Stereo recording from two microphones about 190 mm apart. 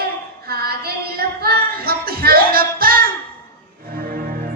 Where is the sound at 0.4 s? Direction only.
55° right (ahead or behind).